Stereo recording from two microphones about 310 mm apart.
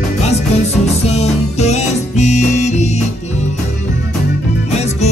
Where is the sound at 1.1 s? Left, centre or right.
Left.